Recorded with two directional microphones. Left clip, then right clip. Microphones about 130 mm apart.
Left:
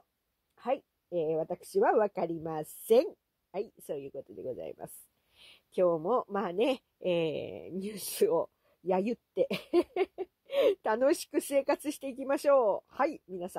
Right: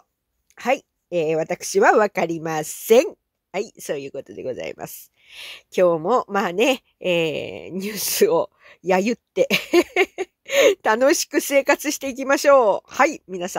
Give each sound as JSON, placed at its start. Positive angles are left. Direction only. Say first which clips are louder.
{"t": 0.6, "sound": "speech", "louder": "right 11 dB", "side_deg": -30}